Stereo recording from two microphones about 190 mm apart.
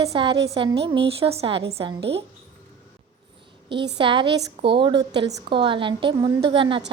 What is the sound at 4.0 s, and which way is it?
A woman's voice, 25° right (ahead or behind).